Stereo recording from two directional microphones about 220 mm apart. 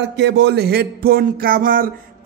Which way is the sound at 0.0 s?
55° right (ahead or behind).